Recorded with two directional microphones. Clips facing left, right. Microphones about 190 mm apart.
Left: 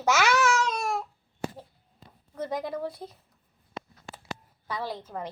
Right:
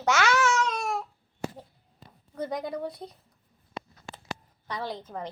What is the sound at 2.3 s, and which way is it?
Speech, centre (ahead or behind).